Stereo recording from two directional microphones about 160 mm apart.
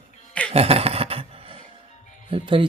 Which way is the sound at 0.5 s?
40° right (ahead or behind).